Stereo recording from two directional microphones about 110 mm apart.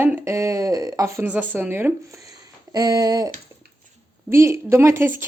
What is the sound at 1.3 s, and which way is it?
Speech, 15° right (ahead or behind).